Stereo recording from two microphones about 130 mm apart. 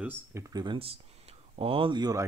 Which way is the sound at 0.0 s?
20° right (ahead or behind).